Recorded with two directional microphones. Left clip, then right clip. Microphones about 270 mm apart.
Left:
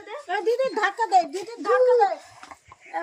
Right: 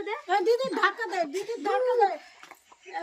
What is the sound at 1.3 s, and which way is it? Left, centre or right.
Speech, centre.